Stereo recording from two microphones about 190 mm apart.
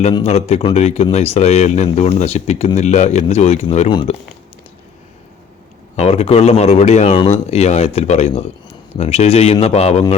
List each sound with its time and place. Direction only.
0.1 s speech: 30° left (ahead or behind)
6.0 s speech: 30° left (ahead or behind)